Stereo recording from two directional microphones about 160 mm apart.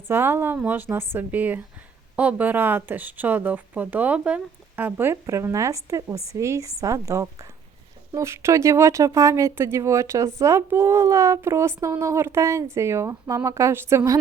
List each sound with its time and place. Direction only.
0.1 s a woman's voice: 15° right (ahead or behind)